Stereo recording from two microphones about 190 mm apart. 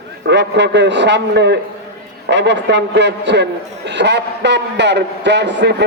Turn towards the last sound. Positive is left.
turn(degrees=-65)  # may be behind; listen again after turning